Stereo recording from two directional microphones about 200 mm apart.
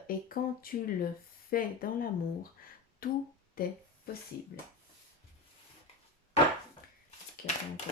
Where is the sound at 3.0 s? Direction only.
50° left (ahead or behind).